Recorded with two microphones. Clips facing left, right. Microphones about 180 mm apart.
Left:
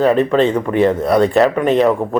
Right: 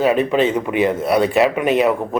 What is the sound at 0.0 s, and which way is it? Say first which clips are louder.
Speech: left 3 dB; 5° right (ahead or behind).